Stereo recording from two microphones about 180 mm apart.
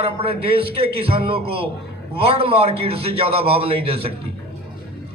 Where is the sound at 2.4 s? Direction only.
30° right (ahead or behind).